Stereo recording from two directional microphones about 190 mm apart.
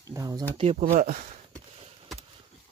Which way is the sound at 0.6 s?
30° right (ahead or behind).